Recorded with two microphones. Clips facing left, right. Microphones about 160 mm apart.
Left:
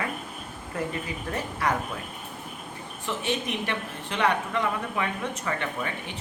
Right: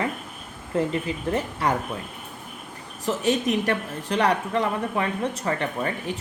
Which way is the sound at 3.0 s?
40° right (ahead or behind).